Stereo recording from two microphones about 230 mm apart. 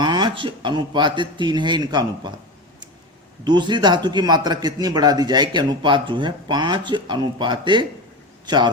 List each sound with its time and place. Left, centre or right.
0.0 s a man's voice: centre
3.4 s a man's voice: centre